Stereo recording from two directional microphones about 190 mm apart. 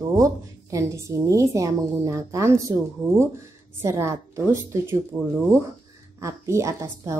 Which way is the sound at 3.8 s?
15° right (ahead or behind).